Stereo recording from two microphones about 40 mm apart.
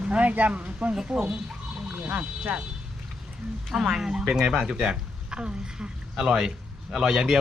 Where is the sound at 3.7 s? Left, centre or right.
Centre.